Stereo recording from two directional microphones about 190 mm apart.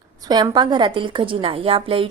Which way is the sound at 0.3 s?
20° right (ahead or behind).